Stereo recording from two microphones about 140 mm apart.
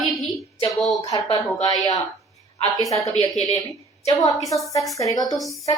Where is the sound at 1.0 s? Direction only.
25° left (ahead or behind).